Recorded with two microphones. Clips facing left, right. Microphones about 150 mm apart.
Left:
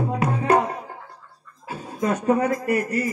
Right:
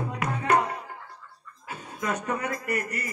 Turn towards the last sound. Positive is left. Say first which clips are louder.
# left 8 dB
turn(degrees=30)  # may be behind; listen again after turning